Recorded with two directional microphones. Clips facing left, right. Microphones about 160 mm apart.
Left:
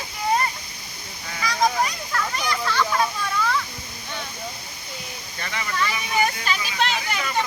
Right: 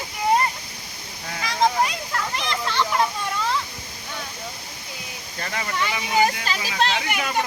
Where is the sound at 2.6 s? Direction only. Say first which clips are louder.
Right 1 dB; 25° right (ahead or behind).